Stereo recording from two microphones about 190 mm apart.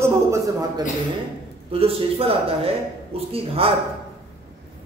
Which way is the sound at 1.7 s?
30° right (ahead or behind).